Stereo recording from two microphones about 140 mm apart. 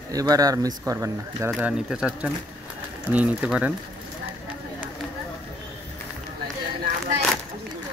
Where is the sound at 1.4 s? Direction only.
5° right (ahead or behind).